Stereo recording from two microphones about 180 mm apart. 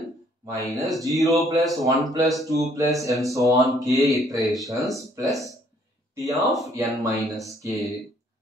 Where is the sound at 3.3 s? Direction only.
20° right (ahead or behind).